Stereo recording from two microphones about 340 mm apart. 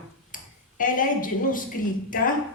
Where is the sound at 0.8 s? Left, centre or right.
Left.